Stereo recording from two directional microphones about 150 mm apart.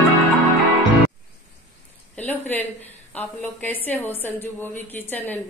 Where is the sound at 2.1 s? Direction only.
10° left (ahead or behind).